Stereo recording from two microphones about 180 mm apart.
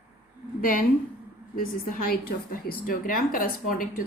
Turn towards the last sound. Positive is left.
turn(degrees=50)  # may be behind; listen again after turning